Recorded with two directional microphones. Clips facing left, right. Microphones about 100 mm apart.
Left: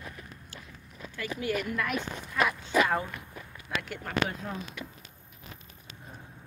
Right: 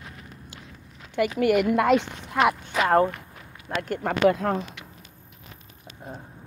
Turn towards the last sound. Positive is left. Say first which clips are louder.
# right 11 dB
turn(degrees=-85)